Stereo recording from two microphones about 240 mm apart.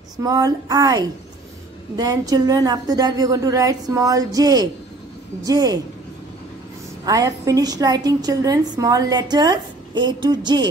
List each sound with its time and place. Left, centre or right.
0.2 s a woman's voice: centre
7.1 s a woman's voice: centre